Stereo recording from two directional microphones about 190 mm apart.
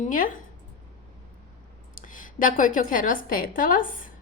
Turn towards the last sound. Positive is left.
turn(degrees=45)  # may be behind; listen again after turning